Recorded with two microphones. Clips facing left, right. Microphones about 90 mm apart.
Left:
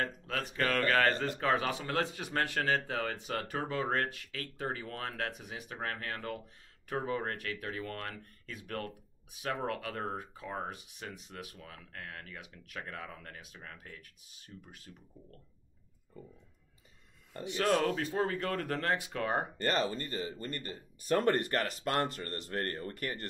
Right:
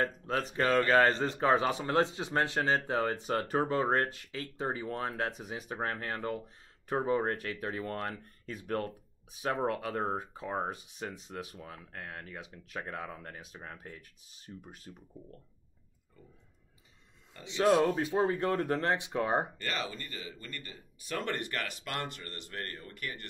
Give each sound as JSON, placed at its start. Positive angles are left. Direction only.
{"t": 0.3, "sound": "speech", "side_deg": -30}
{"t": 17.5, "sound": "speech", "side_deg": -20}
{"t": 19.6, "sound": "speech", "side_deg": 40}